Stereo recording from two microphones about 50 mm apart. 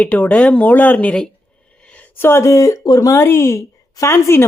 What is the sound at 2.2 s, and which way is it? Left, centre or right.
Speech, left.